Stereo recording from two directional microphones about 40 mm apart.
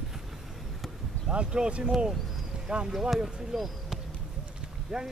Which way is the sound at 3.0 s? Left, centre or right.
Centre.